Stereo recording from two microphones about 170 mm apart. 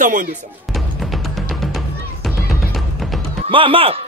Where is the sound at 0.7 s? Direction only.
Centre (ahead or behind).